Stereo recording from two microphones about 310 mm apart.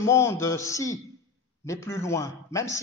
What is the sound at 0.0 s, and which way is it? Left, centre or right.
A man's voice, centre.